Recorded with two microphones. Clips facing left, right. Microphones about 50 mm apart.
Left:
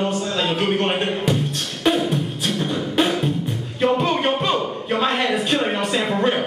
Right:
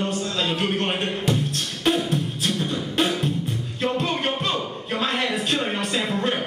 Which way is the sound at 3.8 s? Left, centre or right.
Centre.